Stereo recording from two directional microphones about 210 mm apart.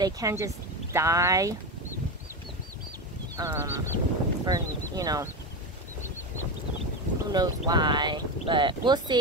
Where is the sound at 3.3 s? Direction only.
15° right (ahead or behind).